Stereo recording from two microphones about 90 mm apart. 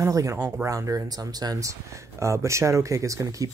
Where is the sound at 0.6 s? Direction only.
35° right (ahead or behind).